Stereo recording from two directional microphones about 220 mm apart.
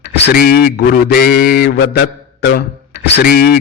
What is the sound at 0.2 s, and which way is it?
A man's voice, 45° left (ahead or behind).